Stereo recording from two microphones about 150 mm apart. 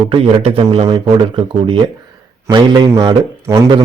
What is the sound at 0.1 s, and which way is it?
A man's voice, 35° right (ahead or behind).